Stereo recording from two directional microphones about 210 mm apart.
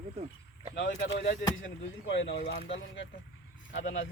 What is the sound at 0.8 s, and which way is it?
Speech, 45° left (ahead or behind).